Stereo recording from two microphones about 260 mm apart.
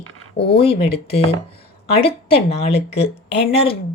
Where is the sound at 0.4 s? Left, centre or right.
Left.